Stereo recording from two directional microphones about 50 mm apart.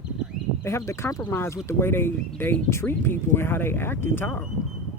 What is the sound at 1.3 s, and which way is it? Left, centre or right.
Speech, left.